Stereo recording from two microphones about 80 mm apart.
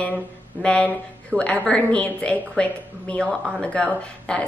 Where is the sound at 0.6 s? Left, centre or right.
Centre.